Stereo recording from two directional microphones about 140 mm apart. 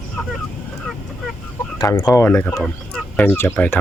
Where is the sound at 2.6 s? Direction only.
10° left (ahead or behind).